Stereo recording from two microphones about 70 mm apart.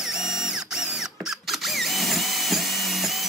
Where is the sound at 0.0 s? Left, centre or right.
Centre.